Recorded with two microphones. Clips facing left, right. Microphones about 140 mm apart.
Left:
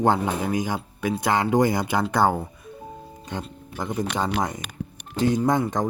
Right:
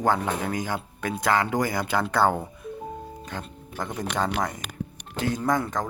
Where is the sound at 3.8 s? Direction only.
10° left (ahead or behind).